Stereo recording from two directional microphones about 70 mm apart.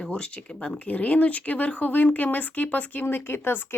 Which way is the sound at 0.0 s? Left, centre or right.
Centre.